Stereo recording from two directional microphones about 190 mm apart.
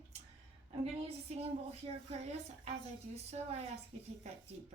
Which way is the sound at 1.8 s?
35° right (ahead or behind).